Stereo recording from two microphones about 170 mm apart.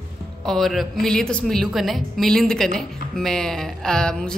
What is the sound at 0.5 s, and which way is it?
A woman's voice, centre (ahead or behind).